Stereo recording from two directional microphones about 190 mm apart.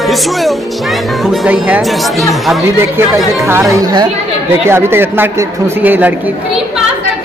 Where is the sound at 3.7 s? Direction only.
20° right (ahead or behind).